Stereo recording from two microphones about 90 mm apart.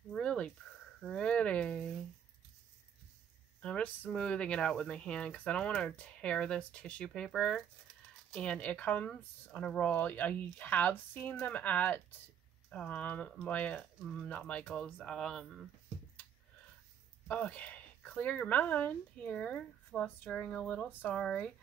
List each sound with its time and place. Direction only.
0.1 s a sound: 10° left (ahead or behind)
3.6 s speech: 15° left (ahead or behind)
7.2 s speech: centre (ahead or behind)
8.3 s speech: 10° left (ahead or behind)
17.3 s speech: 15° left (ahead or behind)